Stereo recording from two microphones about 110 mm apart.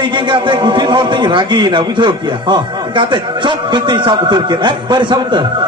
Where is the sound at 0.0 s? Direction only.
45° right (ahead or behind).